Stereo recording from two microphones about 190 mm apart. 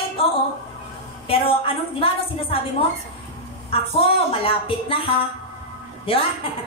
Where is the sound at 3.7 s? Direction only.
30° left (ahead or behind).